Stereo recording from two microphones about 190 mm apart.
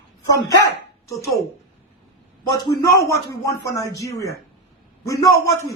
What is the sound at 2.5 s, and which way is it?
A man's voice, 20° left (ahead or behind).